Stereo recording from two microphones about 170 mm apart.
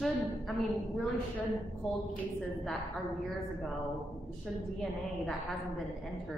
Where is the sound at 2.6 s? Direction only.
Centre (ahead or behind).